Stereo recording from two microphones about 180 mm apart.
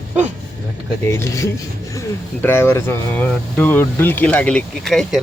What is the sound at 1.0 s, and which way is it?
Speech, 15° left (ahead or behind).